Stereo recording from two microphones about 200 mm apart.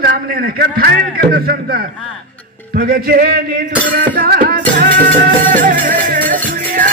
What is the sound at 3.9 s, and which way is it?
Music, 50° right (ahead or behind).